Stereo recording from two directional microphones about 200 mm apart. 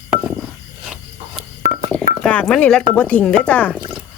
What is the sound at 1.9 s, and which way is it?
Telephone dialing, 5° left (ahead or behind).